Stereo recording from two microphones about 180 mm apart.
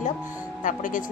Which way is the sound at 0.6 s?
45° left (ahead or behind).